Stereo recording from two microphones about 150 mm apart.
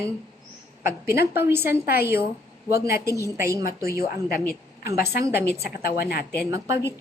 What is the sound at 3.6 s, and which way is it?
Speech, 75° left (ahead or behind).